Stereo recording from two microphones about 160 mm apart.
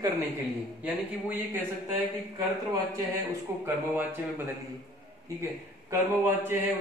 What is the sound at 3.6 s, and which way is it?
Speech, 15° right (ahead or behind).